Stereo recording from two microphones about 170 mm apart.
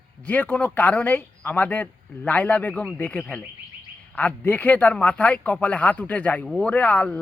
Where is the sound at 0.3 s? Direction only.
10° left (ahead or behind).